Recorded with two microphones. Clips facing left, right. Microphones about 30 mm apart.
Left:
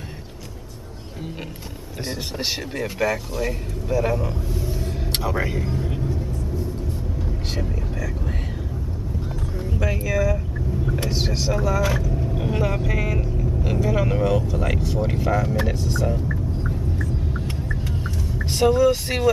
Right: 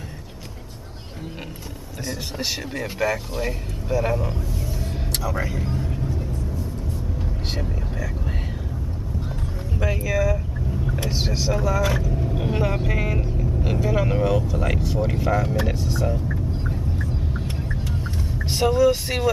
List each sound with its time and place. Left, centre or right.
2.7 s speech: centre
4.6 s vehicle: centre
5.3 s speech: left
5.6 s speech: centre
5.9 s vehicle: centre
9.8 s speech: centre
15.6 s vehicle: centre
18.4 s speech: centre